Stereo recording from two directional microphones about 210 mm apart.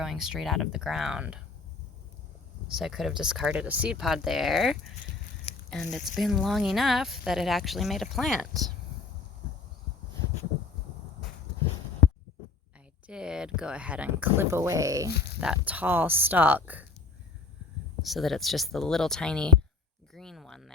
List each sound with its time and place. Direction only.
0.0 s speech: centre (ahead or behind)
2.6 s speech: centre (ahead or behind)
13.1 s speech: 5° right (ahead or behind)
15.1 s speech: 50° left (ahead or behind)
15.4 s speech: 5° right (ahead or behind)
18.0 s speech: centre (ahead or behind)
20.1 s a sound: centre (ahead or behind)